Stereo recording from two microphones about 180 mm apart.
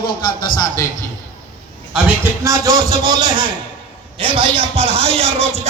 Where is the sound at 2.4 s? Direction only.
20° right (ahead or behind).